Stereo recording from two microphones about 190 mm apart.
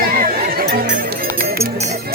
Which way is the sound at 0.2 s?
50° right (ahead or behind).